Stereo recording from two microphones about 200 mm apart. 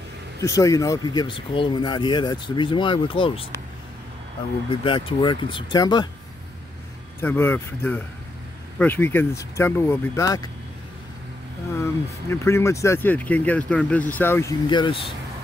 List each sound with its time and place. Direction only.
0.4 s speech: 15° left (ahead or behind)
4.6 s speech: 25° left (ahead or behind)
7.2 s speech: 10° left (ahead or behind)
11.8 s speech: 15° left (ahead or behind)
14.7 s speech: 25° left (ahead or behind)